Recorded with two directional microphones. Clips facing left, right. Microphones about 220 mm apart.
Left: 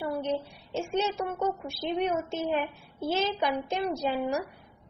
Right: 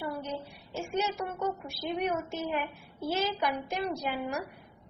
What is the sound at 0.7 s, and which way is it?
A woman's voice, 25° left (ahead or behind).